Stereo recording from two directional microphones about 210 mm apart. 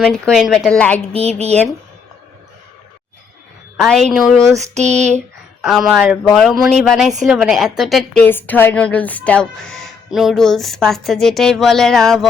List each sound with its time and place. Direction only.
0.0 s speech: centre (ahead or behind)
1.1 s a woman's voice: 30° right (ahead or behind)
3.8 s speech: centre (ahead or behind)
4.7 s a woman's voice: 30° right (ahead or behind)
5.6 s speech: centre (ahead or behind)